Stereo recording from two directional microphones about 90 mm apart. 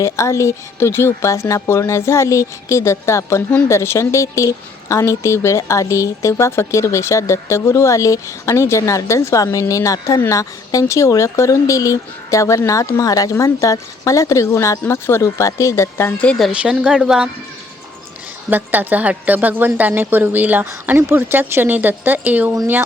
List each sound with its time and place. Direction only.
0.0 s a woman's voice: 35° left (ahead or behind)
16.5 s a woman's voice: 10° right (ahead or behind)
18.5 s a woman's voice: 20° right (ahead or behind)